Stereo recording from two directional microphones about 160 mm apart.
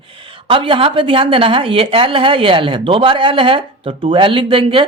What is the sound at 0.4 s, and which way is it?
Speech, 30° right (ahead or behind).